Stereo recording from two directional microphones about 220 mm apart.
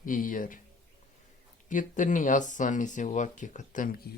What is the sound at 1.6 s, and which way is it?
Speech, 35° left (ahead or behind).